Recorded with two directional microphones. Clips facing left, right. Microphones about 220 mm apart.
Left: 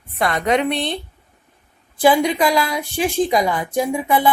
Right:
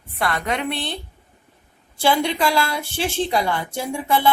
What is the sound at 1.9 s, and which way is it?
A woman's voice, 15° left (ahead or behind).